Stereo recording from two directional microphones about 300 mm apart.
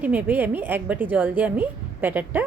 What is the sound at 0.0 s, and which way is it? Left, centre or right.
A woman's voice, centre.